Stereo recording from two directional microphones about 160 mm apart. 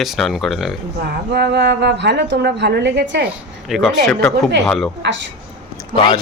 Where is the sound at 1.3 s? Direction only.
90° right.